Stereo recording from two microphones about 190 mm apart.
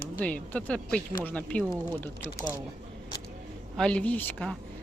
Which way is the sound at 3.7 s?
5° left (ahead or behind).